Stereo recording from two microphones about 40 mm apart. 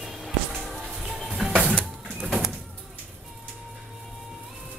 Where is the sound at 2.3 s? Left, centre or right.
Centre.